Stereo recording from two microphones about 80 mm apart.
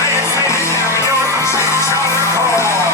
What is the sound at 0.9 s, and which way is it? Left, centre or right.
Music, left.